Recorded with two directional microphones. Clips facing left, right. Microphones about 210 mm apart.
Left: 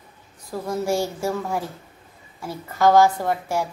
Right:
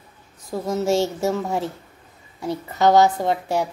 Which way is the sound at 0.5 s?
20° right (ahead or behind).